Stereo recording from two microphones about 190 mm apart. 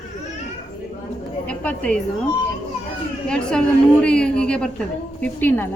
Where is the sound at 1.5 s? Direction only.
5° left (ahead or behind).